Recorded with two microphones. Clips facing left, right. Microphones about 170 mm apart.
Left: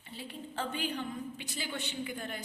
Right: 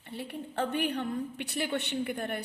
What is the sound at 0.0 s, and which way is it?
A woman's voice, 60° right (ahead or behind).